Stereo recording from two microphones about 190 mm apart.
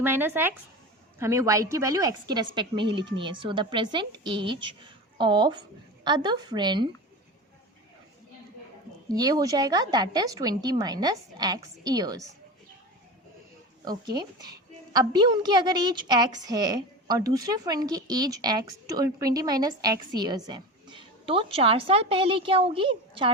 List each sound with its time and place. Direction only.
0.0 s a woman's voice: 10° right (ahead or behind)
9.0 s a woman's voice: 20° right (ahead or behind)
13.8 s a woman's voice: 20° right (ahead or behind)